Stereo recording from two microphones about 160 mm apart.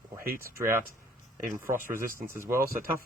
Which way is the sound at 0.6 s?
15° right (ahead or behind).